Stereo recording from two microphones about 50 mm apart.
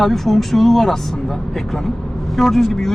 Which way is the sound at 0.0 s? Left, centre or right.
Centre.